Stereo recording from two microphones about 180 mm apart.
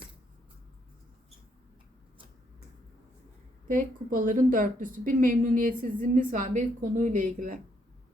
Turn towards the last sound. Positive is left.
turn(degrees=-50)  # may be behind; listen again after turning